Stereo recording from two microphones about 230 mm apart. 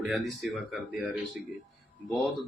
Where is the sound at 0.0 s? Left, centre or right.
Centre.